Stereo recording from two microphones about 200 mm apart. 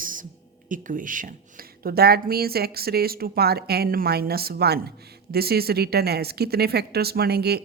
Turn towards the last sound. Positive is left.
turn(degrees=-55)  # may be behind; listen again after turning